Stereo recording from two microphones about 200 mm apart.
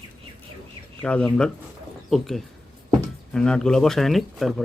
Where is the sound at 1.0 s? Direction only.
5° left (ahead or behind).